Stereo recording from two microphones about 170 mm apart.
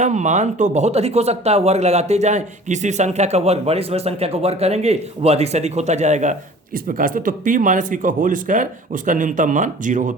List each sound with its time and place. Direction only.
0.0 s speech: 45° right (ahead or behind)
6.7 s speech: 55° right (ahead or behind)